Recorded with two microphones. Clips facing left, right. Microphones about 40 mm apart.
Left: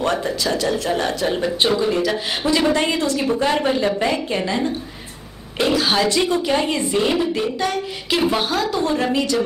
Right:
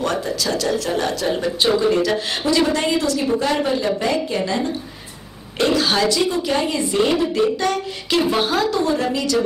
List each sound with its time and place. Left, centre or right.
0.0 s a woman's voice: left
1.7 s speech: centre
2.4 s speech: centre
3.4 s a woman's voice: centre
5.6 s speech: centre
6.0 s a woman's voice: left
6.9 s speech: centre
8.8 s speech: left